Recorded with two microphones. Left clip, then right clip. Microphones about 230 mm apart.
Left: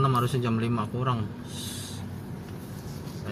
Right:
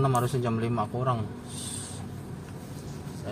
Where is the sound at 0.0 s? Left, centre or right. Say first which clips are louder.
Left 1 dB; centre.